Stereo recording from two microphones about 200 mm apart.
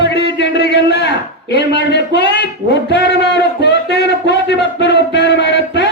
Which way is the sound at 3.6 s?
60° left (ahead or behind).